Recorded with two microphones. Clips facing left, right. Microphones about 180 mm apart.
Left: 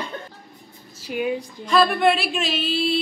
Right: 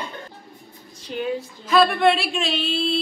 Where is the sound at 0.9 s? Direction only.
10° left (ahead or behind).